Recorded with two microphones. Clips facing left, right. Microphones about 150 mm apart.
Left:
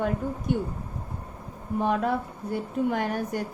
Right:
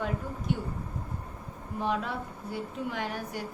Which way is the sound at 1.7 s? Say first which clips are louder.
Left 6 dB; 50° left (ahead or behind).